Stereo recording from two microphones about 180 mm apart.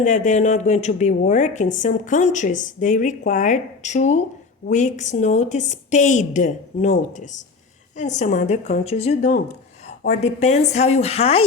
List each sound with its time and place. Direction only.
0.0 s speech: 45° left (ahead or behind)